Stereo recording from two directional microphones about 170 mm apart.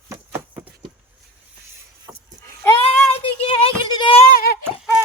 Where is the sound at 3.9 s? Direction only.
25° left (ahead or behind).